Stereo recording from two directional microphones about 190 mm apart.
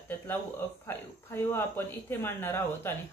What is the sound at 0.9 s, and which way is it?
Speech, 10° left (ahead or behind).